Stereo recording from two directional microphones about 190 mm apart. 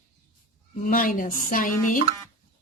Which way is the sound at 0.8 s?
45° left (ahead or behind).